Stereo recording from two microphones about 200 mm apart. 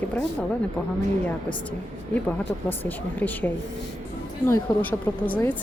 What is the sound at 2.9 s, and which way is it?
Speech, 10° left (ahead or behind).